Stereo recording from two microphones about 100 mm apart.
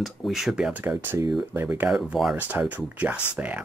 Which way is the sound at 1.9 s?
5° right (ahead or behind).